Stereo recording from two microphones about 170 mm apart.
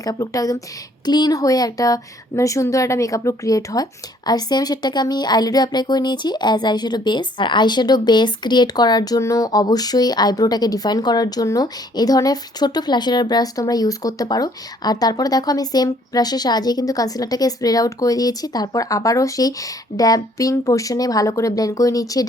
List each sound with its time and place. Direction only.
0.0 s speech: 20° left (ahead or behind)